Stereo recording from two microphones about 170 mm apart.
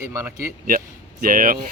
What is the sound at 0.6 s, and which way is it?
Speech, 55° right (ahead or behind).